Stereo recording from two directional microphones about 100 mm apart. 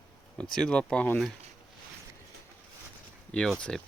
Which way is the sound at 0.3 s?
5° left (ahead or behind).